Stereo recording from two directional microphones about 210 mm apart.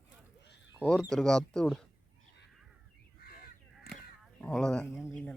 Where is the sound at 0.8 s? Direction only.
5° left (ahead or behind).